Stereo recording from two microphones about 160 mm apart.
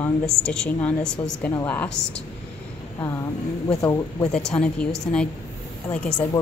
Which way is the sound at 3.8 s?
20° left (ahead or behind).